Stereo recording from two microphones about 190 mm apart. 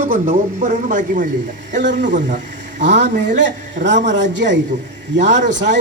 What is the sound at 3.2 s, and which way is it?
A man's voice, 70° right (ahead or behind).